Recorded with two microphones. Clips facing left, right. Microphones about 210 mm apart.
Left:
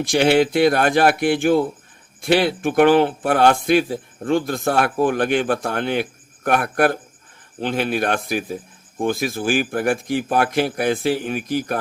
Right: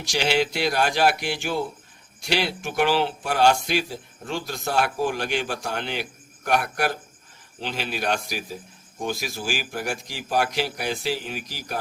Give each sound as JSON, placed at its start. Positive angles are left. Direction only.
{"t": 0.0, "sound": "speech", "side_deg": 55}